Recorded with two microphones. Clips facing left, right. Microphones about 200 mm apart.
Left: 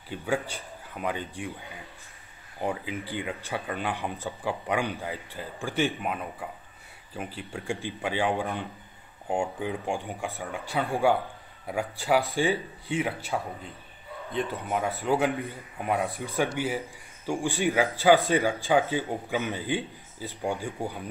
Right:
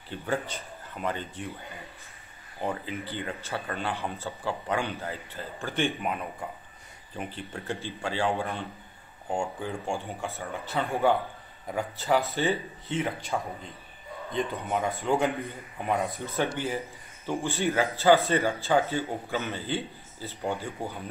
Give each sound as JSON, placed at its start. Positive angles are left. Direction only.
{"t": 0.1, "sound": "speech", "side_deg": 10}
{"t": 2.7, "sound": "speech", "side_deg": 10}